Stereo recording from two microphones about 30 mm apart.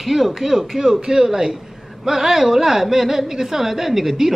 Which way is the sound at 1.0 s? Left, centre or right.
Right.